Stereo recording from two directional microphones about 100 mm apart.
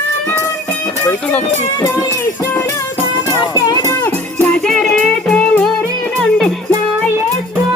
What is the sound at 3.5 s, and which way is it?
Music, 35° left (ahead or behind).